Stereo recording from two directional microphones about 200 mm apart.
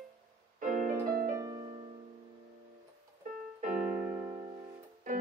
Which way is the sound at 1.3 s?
20° right (ahead or behind).